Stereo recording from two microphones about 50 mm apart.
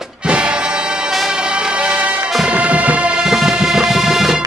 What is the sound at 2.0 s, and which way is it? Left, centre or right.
Music, right.